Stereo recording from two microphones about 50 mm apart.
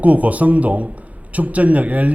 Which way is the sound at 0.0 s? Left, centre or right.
Right.